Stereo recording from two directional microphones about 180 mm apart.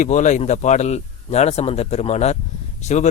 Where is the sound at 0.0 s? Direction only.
45° left (ahead or behind).